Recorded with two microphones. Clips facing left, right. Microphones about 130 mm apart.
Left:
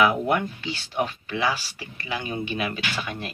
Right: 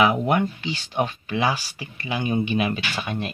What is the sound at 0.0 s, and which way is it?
Speech, 20° right (ahead or behind).